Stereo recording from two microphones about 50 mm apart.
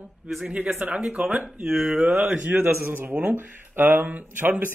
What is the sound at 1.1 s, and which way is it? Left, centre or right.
Speech, right.